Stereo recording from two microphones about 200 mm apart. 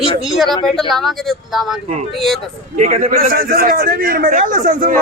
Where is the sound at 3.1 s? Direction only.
50° right (ahead or behind).